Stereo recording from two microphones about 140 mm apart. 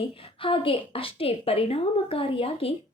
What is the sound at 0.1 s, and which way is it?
A woman's voice, 40° left (ahead or behind).